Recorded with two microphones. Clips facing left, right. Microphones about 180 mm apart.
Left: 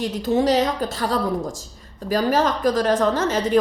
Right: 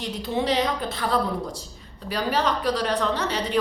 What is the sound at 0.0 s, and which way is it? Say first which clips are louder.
A woman's voice: left 6 dB; 45° left (ahead or behind).